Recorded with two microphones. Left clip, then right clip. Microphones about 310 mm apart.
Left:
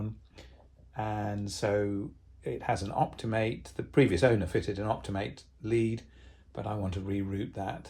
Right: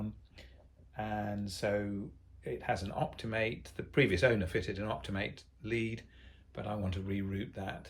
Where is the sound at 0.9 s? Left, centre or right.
Centre.